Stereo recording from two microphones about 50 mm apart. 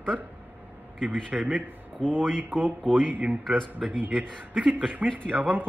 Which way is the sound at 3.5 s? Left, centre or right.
Centre.